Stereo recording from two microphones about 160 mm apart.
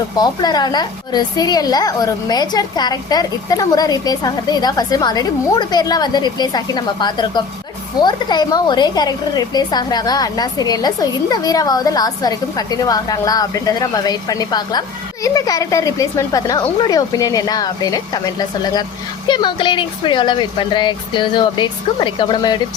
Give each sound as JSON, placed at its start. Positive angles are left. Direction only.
{"t": 0.2, "sound": "a woman's voice", "side_deg": 25}